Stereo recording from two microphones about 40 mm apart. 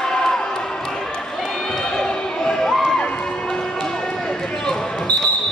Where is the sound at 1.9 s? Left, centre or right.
Centre.